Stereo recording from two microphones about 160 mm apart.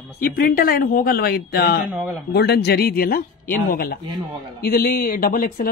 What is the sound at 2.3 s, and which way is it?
Speech, 85° left.